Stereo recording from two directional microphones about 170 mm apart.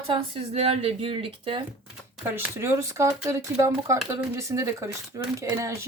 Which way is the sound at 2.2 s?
15° right (ahead or behind).